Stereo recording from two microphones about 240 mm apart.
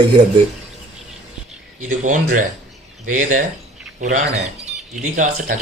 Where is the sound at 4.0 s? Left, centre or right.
Right.